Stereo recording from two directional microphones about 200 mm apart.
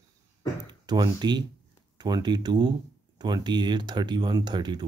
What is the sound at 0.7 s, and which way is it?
Speech, 20° right (ahead or behind).